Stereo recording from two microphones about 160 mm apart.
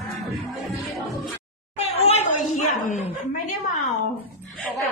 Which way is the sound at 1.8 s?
40° left (ahead or behind).